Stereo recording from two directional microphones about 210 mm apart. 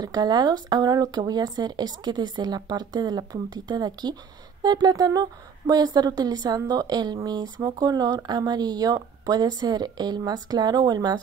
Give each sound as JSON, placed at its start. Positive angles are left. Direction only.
{"t": 0.0, "sound": "a woman's voice", "side_deg": -20}